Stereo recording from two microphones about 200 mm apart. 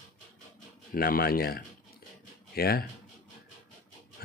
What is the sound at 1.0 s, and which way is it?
Speech, 50° left (ahead or behind).